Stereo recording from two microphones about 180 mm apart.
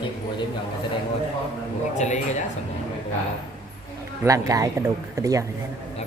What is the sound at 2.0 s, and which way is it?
Speech, 40° left (ahead or behind).